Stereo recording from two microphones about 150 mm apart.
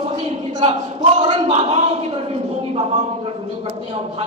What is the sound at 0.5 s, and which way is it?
A man's voice, 45° right (ahead or behind).